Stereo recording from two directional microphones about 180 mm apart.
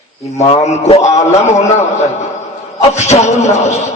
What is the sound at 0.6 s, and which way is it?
Speech, 35° left (ahead or behind).